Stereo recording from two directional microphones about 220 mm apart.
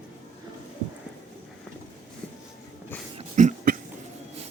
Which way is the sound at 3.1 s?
35° right (ahead or behind).